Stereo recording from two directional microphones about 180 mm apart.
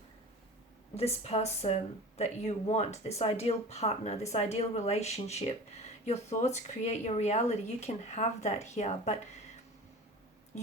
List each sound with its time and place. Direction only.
0.9 s speech: 35° left (ahead or behind)